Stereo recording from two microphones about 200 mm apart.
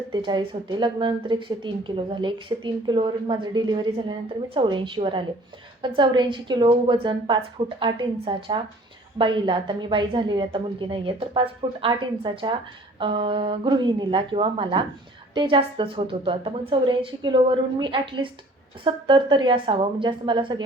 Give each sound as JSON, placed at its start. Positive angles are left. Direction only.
{"t": 0.1, "sound": "a woman's voice", "side_deg": -25}